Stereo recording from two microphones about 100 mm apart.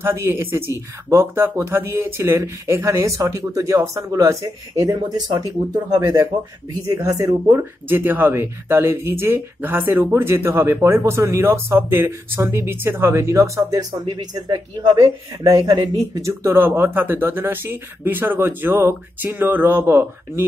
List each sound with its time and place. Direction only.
0.0 s speech: 25° right (ahead or behind); by 6.2 s 40° right (ahead or behind)
6.9 s speech: 30° right (ahead or behind)
7.5 s speech: 20° right (ahead or behind); by 16.0 s 40° right (ahead or behind)
16.2 s speech: 25° right (ahead or behind)